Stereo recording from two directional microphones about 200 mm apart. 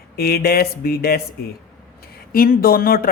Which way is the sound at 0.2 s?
50° left (ahead or behind).